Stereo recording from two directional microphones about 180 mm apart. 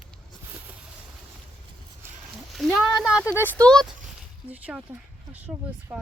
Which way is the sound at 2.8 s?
Centre (ahead or behind).